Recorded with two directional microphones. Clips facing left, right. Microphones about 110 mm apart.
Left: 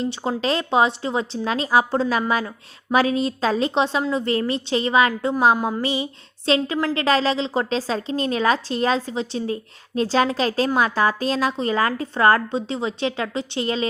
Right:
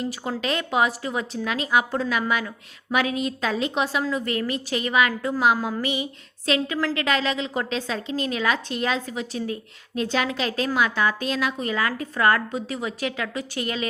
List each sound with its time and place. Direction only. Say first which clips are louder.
0.0 s a woman's voice: left 4 dB; 25° left (ahead or behind)